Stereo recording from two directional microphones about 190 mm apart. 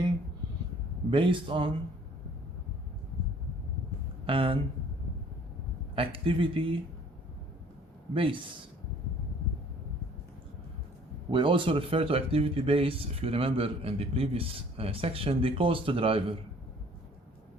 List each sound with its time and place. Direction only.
1.1 s speech: 25° right (ahead or behind)
4.3 s speech: 30° right (ahead or behind)
6.0 s speech: 30° right (ahead or behind)
8.1 s speech: 25° right (ahead or behind)
11.3 s speech: 25° right (ahead or behind)